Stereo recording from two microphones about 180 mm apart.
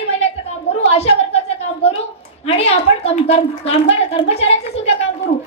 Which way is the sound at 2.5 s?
35° left (ahead or behind).